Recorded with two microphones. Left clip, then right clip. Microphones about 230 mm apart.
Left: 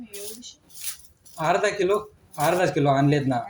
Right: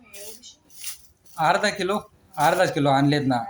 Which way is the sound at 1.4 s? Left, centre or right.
Right.